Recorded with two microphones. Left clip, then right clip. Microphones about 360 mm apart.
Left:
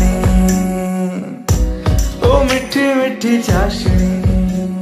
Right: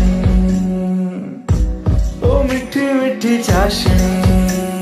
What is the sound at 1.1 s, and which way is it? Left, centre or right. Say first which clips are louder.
Music: left 3 dB; left.